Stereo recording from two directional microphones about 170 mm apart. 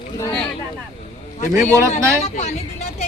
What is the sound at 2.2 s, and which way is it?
Speech, 40° left (ahead or behind).